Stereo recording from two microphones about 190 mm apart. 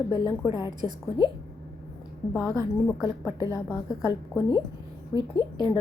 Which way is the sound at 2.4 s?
15° left (ahead or behind).